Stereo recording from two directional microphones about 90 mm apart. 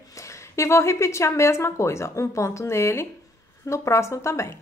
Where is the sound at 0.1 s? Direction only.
35° left (ahead or behind).